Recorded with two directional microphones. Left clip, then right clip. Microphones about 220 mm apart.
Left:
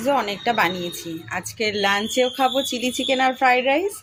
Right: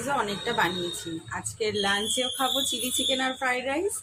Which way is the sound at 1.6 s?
30° left (ahead or behind).